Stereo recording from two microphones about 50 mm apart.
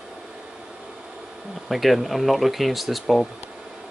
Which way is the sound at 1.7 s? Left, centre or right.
Centre.